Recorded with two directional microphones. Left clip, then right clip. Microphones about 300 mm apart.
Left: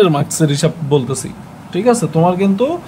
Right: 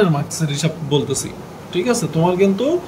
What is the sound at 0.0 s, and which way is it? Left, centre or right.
Speech, left.